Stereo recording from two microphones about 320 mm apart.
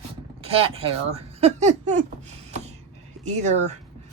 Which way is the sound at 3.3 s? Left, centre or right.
Right.